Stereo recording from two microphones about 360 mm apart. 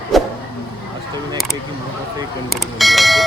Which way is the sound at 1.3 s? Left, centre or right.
Centre.